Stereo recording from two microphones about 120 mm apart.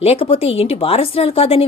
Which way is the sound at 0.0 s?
55° left (ahead or behind).